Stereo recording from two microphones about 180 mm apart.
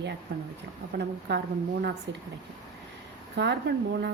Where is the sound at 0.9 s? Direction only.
70° right (ahead or behind).